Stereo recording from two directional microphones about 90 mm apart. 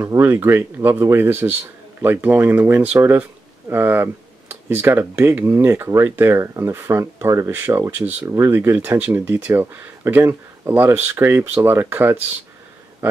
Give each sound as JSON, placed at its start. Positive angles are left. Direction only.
{"t": 0.1, "sound": "speech", "side_deg": -25}